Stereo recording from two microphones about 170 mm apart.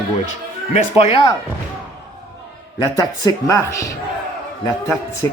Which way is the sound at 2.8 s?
20° left (ahead or behind).